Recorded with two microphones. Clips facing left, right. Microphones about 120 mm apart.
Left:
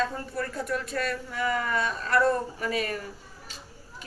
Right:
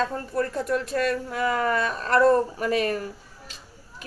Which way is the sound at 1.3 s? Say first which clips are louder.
Right 4 dB; 50° right (ahead or behind).